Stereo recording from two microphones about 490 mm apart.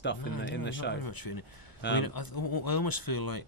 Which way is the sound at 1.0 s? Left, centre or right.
Left.